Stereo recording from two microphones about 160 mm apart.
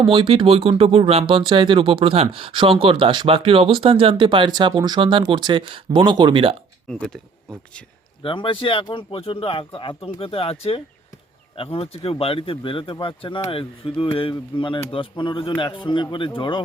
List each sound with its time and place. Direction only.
0.0 s speech: 35° right (ahead or behind)
6.8 s speech: 5° left (ahead or behind)
8.2 s speech: 30° left (ahead or behind)